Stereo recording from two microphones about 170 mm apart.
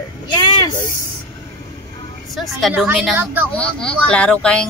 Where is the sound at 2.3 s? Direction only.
Centre (ahead or behind).